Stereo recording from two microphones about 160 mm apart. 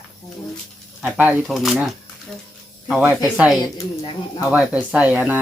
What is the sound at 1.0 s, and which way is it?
Speech, 5° right (ahead or behind).